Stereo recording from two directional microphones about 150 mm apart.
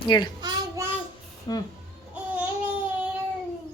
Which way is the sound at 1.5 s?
30° left (ahead or behind).